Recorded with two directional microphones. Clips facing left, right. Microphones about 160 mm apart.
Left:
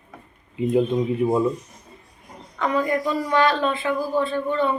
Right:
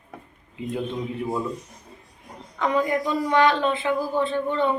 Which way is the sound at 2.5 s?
15° right (ahead or behind).